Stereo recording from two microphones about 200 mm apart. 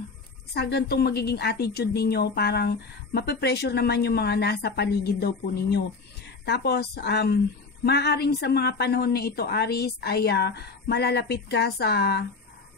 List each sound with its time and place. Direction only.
0.6 s speech: 55° left (ahead or behind)